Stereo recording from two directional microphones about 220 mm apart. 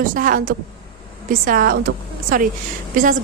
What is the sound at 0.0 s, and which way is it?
A woman's voice, 40° right (ahead or behind).